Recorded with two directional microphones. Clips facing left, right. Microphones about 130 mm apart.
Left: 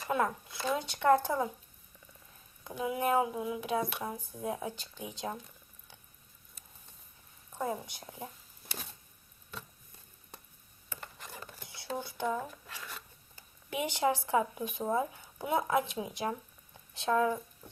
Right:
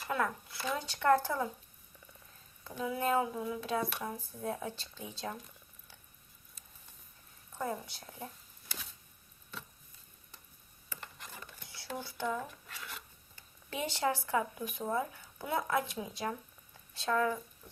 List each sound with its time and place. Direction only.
0.1 s speech: 20° left (ahead or behind)
2.6 s speech: 15° left (ahead or behind)
7.8 s speech: 15° left (ahead or behind)
11.6 s speech: 20° left (ahead or behind)
13.7 s speech: 15° left (ahead or behind)